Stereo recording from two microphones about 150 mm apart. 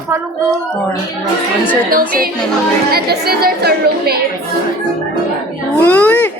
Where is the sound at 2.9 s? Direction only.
90° right.